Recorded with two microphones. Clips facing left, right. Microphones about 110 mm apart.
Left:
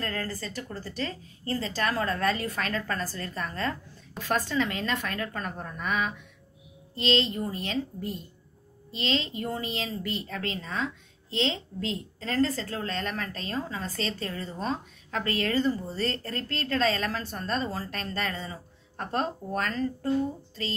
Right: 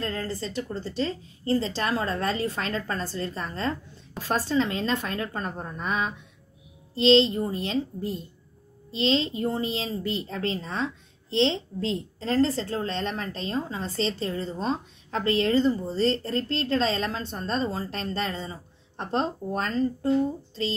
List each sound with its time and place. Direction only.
0.0 s a woman's voice: 25° right (ahead or behind)